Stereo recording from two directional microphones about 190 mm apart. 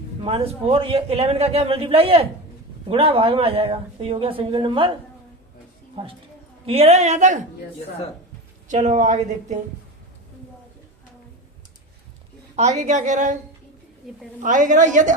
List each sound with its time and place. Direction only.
0.2 s a man's voice: 30° right (ahead or behind)
6.7 s a man's voice: 35° right (ahead or behind)
8.6 s a man's voice: 40° right (ahead or behind)
12.5 s a man's voice: 40° right (ahead or behind)
14.4 s a man's voice: 40° right (ahead or behind)